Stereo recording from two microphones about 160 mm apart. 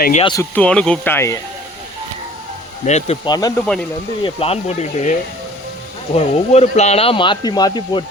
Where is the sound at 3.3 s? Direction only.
25° left (ahead or behind).